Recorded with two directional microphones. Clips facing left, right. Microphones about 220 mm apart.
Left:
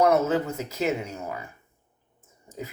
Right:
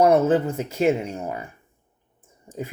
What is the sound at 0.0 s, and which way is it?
Speech, 30° right (ahead or behind).